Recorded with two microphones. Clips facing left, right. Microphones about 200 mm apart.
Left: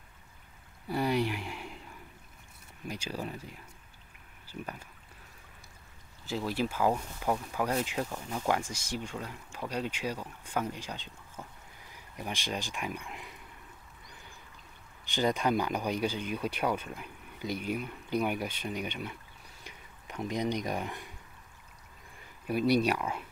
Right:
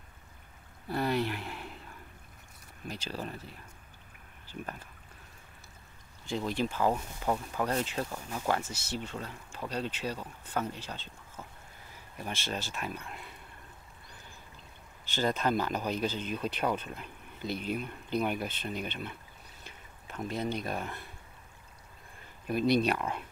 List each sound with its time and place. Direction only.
0.8 s speech: 10° left (ahead or behind)
2.9 s speech: 10° left (ahead or behind)
6.2 s speech: 5° left (ahead or behind)
15.0 s speech: 15° left (ahead or behind)
22.5 s speech: 10° left (ahead or behind)